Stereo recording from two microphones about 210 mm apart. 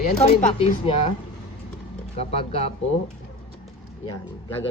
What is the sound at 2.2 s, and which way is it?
Speech, 30° left (ahead or behind).